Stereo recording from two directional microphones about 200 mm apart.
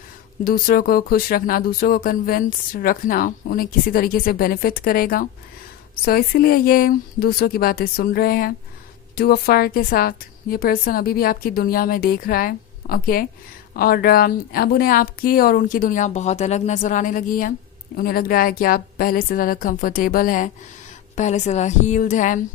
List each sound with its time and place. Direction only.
0.4 s a woman's voice: 45° left (ahead or behind)